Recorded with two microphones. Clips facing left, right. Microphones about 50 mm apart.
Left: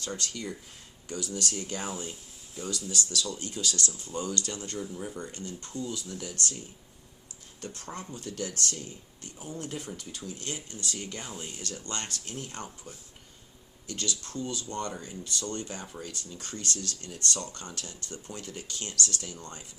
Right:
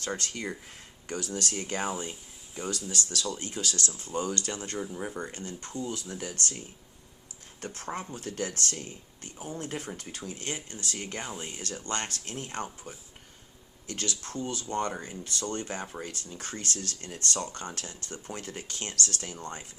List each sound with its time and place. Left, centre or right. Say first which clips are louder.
0.0 s speech: right 2 dB; right
4.9 s speech: right 2 dB; right
5.2 s speech: right 1 dB; right
7.6 s speech: right 4 dB; right